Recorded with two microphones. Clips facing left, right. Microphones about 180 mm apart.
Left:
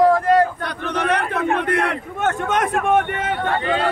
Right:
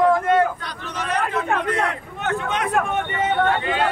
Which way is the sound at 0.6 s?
60° left (ahead or behind).